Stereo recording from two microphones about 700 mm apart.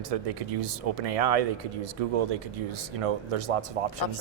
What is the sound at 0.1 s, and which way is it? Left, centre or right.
A man's voice, right.